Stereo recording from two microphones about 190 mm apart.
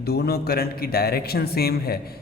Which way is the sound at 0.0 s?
55° left (ahead or behind).